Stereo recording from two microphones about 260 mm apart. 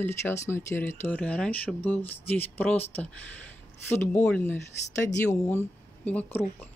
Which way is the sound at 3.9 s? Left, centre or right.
Centre.